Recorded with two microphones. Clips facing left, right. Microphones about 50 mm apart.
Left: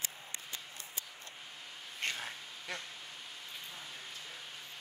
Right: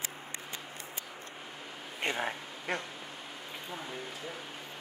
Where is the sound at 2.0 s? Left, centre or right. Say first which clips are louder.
Right 6 dB; centre.